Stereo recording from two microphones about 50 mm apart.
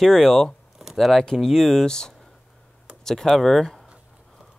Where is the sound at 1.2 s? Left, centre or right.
Centre.